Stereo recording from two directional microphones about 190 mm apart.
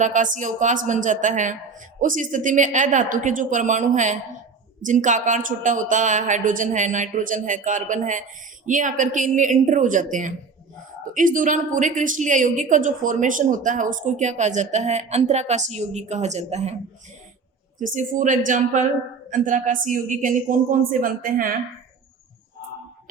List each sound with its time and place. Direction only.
0.0 s a woman's voice: 40° right (ahead or behind)
17.7 s a woman's voice: 40° right (ahead or behind)